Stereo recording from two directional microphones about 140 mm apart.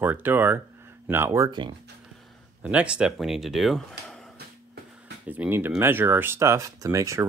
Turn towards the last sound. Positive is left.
turn(degrees=-20)  # may be behind; listen again after turning